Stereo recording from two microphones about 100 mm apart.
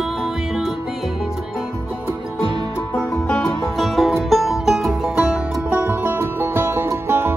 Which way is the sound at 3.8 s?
Centre (ahead or behind).